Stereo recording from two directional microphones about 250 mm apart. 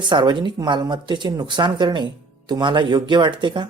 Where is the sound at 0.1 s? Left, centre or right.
Centre.